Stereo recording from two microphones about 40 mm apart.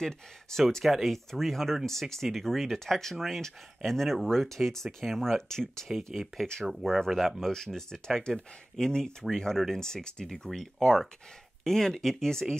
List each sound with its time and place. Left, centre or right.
0.0 s speech: centre
0.8 s speech: centre
6.1 s speech: centre
7.5 s speech: centre